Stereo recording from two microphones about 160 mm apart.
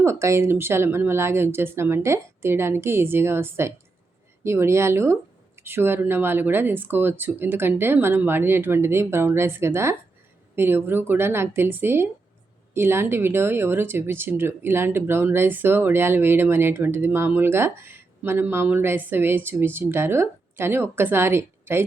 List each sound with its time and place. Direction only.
0.0 s speech: 15° right (ahead or behind)